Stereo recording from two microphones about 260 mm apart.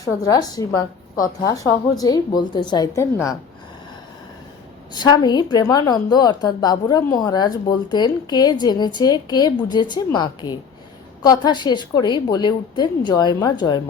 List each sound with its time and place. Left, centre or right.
0.0 s a woman's voice: centre
4.9 s a woman's voice: centre